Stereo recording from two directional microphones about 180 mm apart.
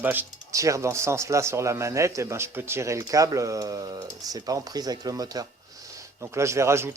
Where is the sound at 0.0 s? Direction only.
10° right (ahead or behind).